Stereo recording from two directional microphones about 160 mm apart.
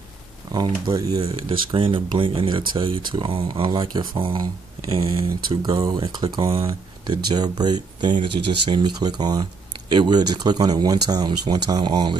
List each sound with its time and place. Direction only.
0.5 s speech: 25° right (ahead or behind)
1.2 s speech: 30° right (ahead or behind)